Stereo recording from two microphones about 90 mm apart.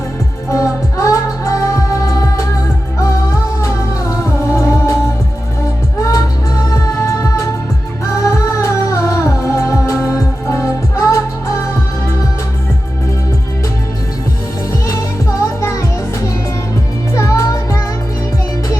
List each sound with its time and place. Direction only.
0.5 s music: 35° left (ahead or behind)
3.6 s music: 30° left (ahead or behind)
6.0 s music: 35° left (ahead or behind)
14.7 s music: 35° left (ahead or behind)
17.2 s music: 35° left (ahead or behind)